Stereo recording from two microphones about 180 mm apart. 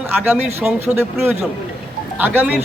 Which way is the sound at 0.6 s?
5° right (ahead or behind).